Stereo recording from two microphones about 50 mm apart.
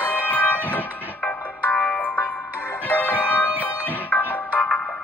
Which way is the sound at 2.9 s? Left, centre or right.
Left.